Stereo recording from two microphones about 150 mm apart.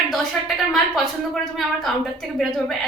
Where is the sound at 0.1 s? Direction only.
Centre (ahead or behind).